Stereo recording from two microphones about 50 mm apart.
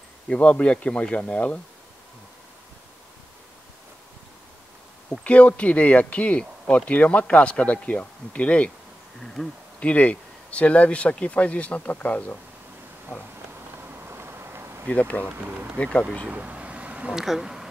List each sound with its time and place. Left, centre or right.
0.3 s speech: left
5.2 s speech: left
9.2 s speech: centre
9.8 s speech: left
13.7 s bee: right
14.9 s speech: left
15.4 s speech: right
15.8 s speech: left
16.3 s a sound: right
17.1 s speech: centre